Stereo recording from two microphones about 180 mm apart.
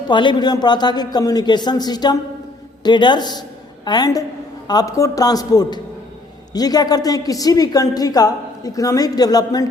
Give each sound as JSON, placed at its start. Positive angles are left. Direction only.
{"t": 0.1, "sound": "a woman's voice", "side_deg": 25}